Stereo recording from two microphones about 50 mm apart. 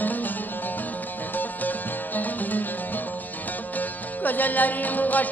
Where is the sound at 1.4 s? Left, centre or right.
Left.